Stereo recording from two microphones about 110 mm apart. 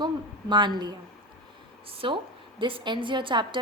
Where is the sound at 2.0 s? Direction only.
50° right (ahead or behind).